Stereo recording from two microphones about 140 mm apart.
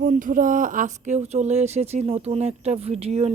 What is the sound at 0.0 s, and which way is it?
Speech, 75° right (ahead or behind).